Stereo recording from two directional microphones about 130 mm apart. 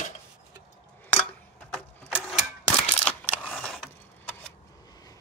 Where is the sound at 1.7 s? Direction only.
5° left (ahead or behind).